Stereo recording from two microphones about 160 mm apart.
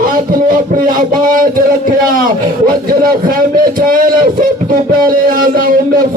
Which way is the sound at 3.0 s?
65° right (ahead or behind).